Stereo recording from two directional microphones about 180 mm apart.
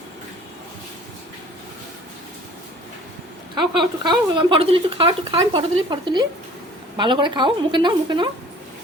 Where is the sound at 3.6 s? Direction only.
25° right (ahead or behind).